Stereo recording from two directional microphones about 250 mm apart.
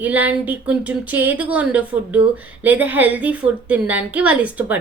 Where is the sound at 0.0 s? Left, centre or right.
Centre.